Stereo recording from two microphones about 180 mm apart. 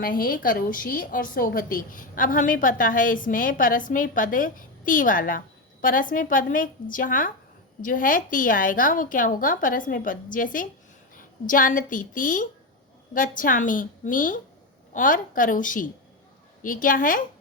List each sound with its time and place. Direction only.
0.0 s a woman's voice: 50° left (ahead or behind)